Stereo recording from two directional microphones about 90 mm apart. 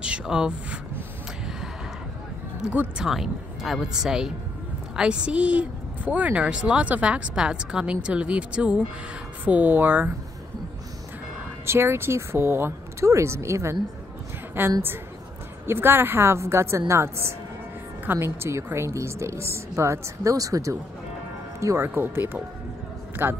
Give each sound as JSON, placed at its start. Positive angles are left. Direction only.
{"t": 0.0, "sound": "speech", "side_deg": -10}
{"t": 3.0, "sound": "speech", "side_deg": -5}
{"t": 11.6, "sound": "speech", "side_deg": -30}